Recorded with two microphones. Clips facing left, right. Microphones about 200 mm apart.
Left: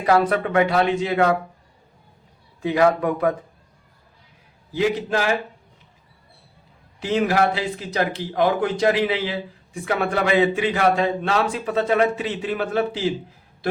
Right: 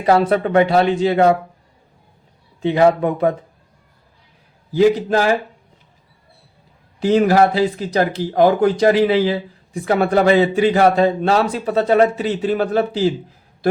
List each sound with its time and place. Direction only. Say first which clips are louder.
0.0 s a man's voice: right 4 dB; 30° right (ahead or behind)
2.6 s speech: right 4 dB; 25° right (ahead or behind)
4.7 s a man's voice: right 7 dB; 35° right (ahead or behind)
7.0 s a man's voice: right 6 dB; 35° right (ahead or behind)